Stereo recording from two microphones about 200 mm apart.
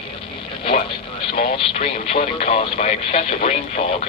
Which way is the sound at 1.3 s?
30° left (ahead or behind).